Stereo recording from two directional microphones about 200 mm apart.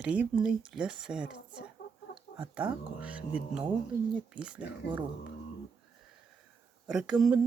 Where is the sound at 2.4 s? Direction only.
5° right (ahead or behind).